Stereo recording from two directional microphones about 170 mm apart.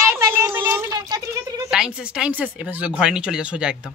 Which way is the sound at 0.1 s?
15° right (ahead or behind).